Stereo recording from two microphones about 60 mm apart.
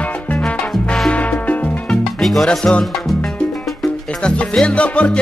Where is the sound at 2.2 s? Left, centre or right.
Centre.